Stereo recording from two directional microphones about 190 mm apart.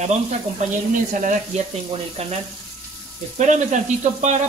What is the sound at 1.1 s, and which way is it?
Frying, 40° right (ahead or behind).